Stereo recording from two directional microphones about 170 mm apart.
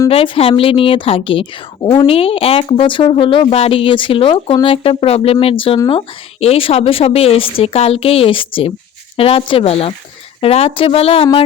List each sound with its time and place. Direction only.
0.1 s speech: 35° left (ahead or behind)